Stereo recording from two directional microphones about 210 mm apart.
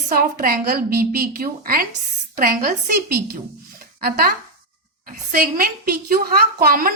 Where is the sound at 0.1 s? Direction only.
45° right (ahead or behind).